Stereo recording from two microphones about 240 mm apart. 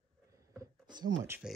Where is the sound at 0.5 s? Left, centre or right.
Centre.